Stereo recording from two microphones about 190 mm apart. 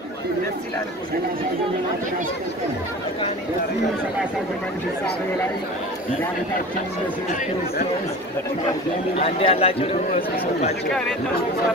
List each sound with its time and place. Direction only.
9.2 s a man's voice: 30° left (ahead or behind)